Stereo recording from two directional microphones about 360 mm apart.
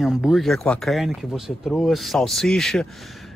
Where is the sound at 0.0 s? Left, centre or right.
Centre.